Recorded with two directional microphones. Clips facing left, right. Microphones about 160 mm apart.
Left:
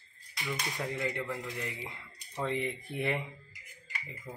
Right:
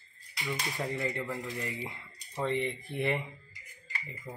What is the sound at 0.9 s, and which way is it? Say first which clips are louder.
Speech: left 1 dB; centre (ahead or behind).